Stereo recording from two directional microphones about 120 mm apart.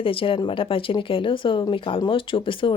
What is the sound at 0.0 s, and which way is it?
A woman's voice, 50° left (ahead or behind).